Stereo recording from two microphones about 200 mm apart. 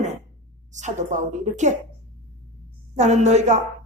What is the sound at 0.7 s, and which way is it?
A woman's voice, 35° right (ahead or behind).